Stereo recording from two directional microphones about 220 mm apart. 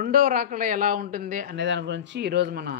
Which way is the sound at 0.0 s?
40° right (ahead or behind).